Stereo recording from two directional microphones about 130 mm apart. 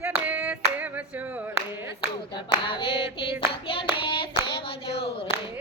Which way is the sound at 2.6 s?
40° left (ahead or behind).